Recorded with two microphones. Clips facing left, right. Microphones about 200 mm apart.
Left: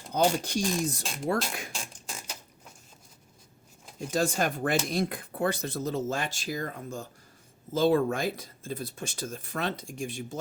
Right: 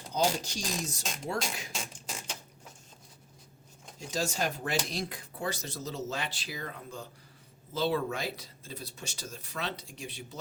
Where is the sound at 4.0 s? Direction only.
55° left (ahead or behind).